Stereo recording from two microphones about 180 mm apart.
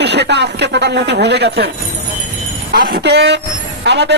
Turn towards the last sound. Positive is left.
turn(degrees=-70)  # may be behind; listen again after turning